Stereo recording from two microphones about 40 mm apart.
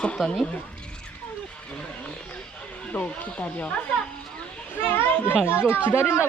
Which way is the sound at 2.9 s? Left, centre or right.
Left.